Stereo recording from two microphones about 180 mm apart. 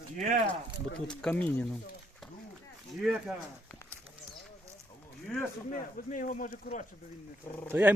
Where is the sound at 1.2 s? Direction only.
5° left (ahead or behind).